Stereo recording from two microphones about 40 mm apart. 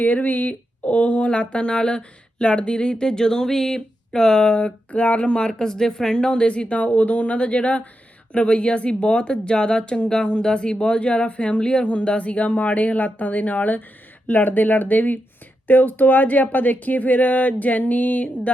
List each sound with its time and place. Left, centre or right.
0.0 s speech: left
5.5 s speech: centre; by 18.5 s left